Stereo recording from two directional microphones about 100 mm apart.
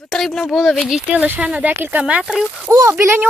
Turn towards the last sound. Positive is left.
turn(degrees=-25)  # may be behind; listen again after turning